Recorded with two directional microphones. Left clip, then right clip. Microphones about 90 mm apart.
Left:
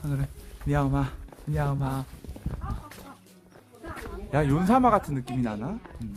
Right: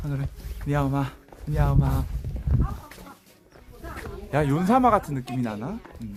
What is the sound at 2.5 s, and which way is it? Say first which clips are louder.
Horse: right 12 dB; 5° right (ahead or behind).